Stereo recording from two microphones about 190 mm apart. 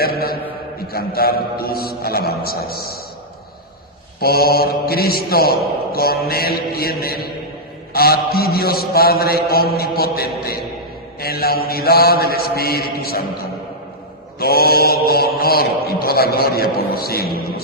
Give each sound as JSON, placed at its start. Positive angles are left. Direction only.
{"t": 0.0, "sound": "a man's voice", "side_deg": 55}
{"t": 4.2, "sound": "a man's voice", "side_deg": 55}
{"t": 14.3, "sound": "a man's voice", "side_deg": 55}